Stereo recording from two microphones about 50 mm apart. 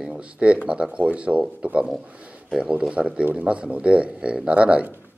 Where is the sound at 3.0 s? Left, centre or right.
Centre.